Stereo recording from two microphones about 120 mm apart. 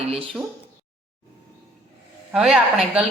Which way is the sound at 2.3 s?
5° right (ahead or behind).